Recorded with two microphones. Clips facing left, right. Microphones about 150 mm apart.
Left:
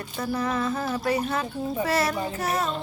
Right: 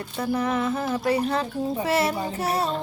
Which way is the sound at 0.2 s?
30° right (ahead or behind).